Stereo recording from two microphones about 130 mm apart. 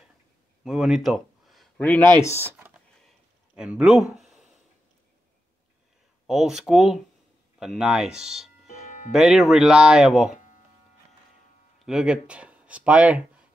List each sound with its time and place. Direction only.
0.7 s a sound: centre (ahead or behind)
1.8 s speech: 15° left (ahead or behind)
2.4 s computer keyboard: 15° right (ahead or behind)
3.0 s a sound: centre (ahead or behind)
6.2 s speech: 5° right (ahead or behind)
11.8 s speech: 5° right (ahead or behind)